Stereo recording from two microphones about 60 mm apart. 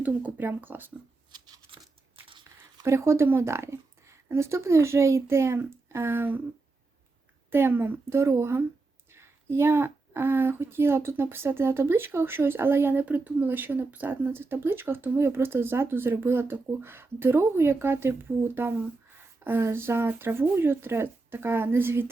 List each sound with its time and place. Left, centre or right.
0.0 s a woman's voice: right
2.8 s a woman's voice: right
7.5 s a woman's voice: right
8.1 s a woman's voice: right
14.3 s a woman's voice: right